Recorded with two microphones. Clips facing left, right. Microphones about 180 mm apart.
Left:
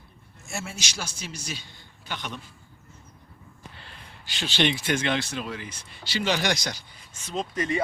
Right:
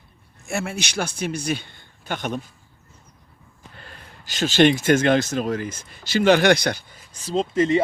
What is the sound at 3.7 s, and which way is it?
Speech, 45° right (ahead or behind).